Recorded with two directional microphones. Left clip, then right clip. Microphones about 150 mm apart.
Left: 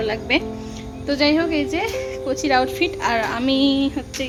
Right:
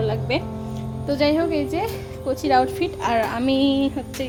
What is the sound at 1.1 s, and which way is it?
A woman's voice, 10° right (ahead or behind).